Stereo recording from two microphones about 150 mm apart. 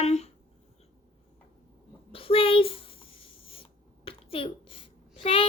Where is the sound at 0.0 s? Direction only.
45° left (ahead or behind).